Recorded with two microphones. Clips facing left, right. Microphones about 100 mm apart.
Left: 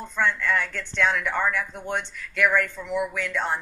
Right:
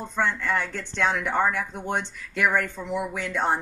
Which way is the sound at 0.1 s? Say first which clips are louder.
Left 1 dB; 30° right (ahead or behind).